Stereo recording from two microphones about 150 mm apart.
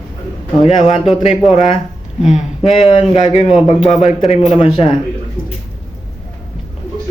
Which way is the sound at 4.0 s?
40° left (ahead or behind).